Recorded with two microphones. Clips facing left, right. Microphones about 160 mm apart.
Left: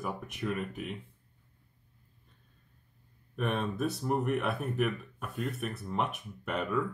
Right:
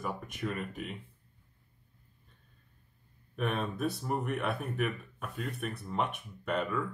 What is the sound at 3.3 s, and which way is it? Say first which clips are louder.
Speech: left 1 dB; centre (ahead or behind).